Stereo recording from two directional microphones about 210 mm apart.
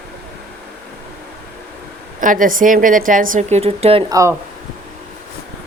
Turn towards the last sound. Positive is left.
turn(degrees=-15)  # may be behind; listen again after turning